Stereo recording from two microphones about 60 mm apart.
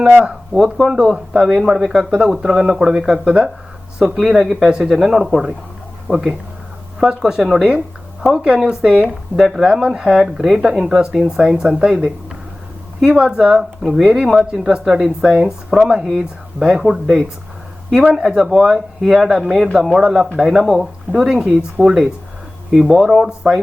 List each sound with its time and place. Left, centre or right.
0.5 s speech: centre